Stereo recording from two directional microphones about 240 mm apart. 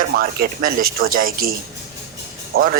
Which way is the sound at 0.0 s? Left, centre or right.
Right.